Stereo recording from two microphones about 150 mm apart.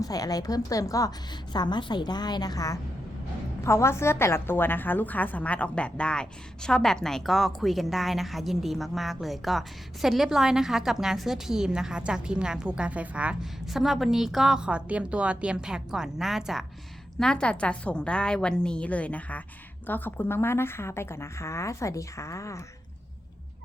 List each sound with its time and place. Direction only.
0.0 s a woman's voice: 25° left (ahead or behind)